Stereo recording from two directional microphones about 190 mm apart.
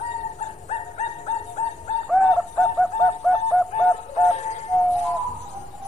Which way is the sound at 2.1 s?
Centre (ahead or behind).